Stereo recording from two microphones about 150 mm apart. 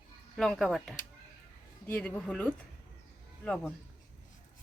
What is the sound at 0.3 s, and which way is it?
A woman's voice, 5° left (ahead or behind).